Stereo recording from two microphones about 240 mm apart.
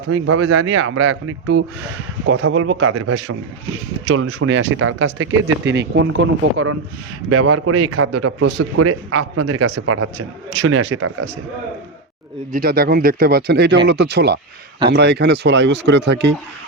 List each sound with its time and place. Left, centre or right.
0.1 s speech: right
0.4 s a man's voice: right
4.0 s speech: right
7.3 s a man's voice: right
8.8 s speech: right
9.8 s speech: right
10.6 s speech: right
12.5 s speech: right